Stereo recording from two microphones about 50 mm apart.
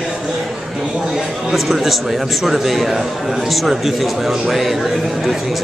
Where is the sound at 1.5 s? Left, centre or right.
Centre.